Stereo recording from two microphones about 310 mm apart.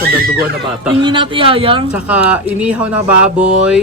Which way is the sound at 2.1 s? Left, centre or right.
Centre.